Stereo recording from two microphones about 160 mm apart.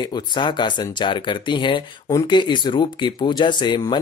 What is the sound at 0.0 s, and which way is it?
Speech, 30° left (ahead or behind).